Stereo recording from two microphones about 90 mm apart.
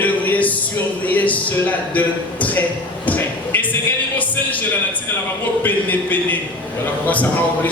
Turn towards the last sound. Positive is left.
turn(degrees=15)  # may be behind; listen again after turning